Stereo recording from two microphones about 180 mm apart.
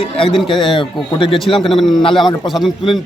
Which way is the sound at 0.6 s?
25° left (ahead or behind).